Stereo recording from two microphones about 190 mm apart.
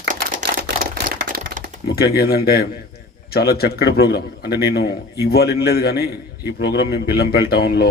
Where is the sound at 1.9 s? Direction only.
55° left (ahead or behind).